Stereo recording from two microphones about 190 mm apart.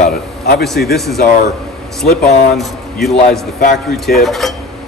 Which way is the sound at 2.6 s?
Centre (ahead or behind).